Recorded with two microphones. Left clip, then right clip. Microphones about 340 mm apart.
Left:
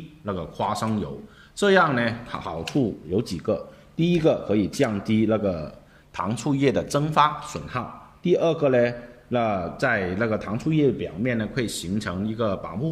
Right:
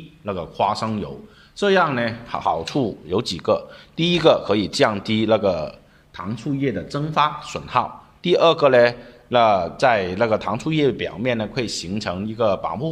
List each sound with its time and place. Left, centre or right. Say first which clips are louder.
0.2 s a man's voice: right 6 dB; centre
2.7 s speech: right 3 dB; right
3.2 s a man's voice: right 6 dB; centre
6.1 s a man's voice: left 2 dB; centre